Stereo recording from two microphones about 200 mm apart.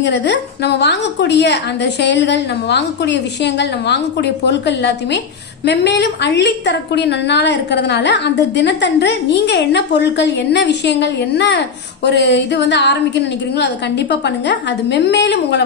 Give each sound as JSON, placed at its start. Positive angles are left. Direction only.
{"t": 0.0, "sound": "a woman's voice", "side_deg": 60}
{"t": 14.2, "sound": "a woman's voice", "side_deg": 60}